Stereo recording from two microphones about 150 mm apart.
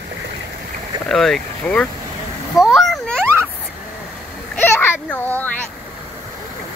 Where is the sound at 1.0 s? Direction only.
Centre (ahead or behind).